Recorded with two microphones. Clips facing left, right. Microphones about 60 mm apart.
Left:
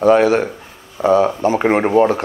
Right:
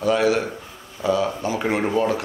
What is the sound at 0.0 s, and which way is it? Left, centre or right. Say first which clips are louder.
Speech: left 7 dB; left.